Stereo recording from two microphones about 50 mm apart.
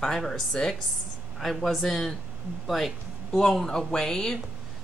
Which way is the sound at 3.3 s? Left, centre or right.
Centre.